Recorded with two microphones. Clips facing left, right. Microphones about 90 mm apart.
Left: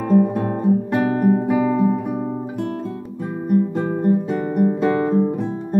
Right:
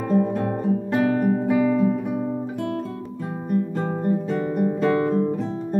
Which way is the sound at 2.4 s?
20° left (ahead or behind).